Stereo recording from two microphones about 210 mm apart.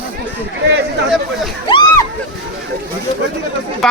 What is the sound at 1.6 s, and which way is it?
Splash, 20° left (ahead or behind).